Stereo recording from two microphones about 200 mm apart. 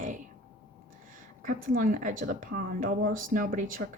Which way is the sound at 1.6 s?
45° right (ahead or behind).